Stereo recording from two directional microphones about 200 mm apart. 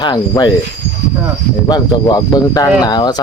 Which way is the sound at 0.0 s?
20° left (ahead or behind).